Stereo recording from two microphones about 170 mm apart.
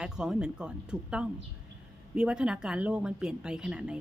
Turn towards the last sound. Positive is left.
turn(degrees=-5)  # may be behind; listen again after turning